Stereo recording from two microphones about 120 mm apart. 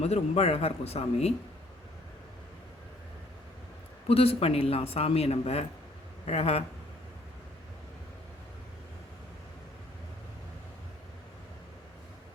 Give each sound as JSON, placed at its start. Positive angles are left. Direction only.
{"t": 0.0, "sound": "speech", "side_deg": 60}
{"t": 4.1, "sound": "speech", "side_deg": 55}